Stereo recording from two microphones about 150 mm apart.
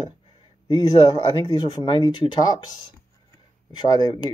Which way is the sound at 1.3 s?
30° left (ahead or behind).